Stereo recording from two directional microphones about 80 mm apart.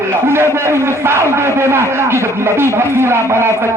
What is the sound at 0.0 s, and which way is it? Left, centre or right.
A man's voice, right.